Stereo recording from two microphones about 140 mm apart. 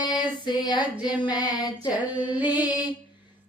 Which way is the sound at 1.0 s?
10° right (ahead or behind).